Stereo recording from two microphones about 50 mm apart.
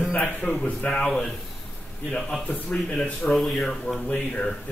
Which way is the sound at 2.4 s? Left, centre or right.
Left.